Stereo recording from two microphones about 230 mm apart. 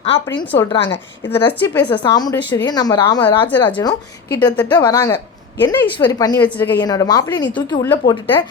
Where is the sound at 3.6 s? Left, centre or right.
Centre.